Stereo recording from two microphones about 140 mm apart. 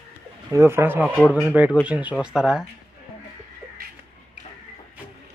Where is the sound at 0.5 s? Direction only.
20° right (ahead or behind).